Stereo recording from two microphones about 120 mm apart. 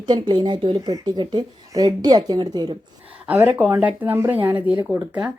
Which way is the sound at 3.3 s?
15° right (ahead or behind).